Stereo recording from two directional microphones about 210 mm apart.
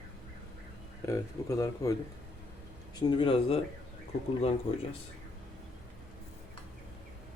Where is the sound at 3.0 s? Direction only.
25° left (ahead or behind).